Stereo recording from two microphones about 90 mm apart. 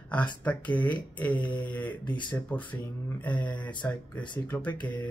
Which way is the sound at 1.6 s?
15° left (ahead or behind).